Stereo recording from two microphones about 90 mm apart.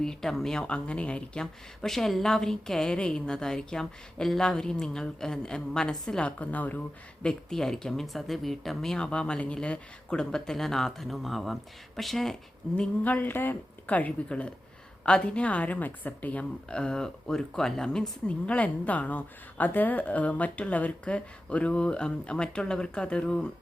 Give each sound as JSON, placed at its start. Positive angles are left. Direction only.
{"t": 0.0, "sound": "speech", "side_deg": 5}
{"t": 13.1, "sound": "speech", "side_deg": 20}